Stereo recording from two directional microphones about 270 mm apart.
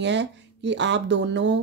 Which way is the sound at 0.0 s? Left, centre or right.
Right.